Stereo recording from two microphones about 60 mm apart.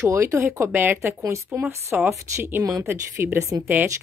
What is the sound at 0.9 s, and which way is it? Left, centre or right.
Speech, right.